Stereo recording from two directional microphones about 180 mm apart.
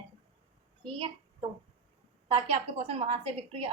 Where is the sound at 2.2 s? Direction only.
35° right (ahead or behind).